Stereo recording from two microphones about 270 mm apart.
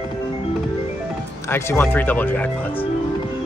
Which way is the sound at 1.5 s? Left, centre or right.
Centre.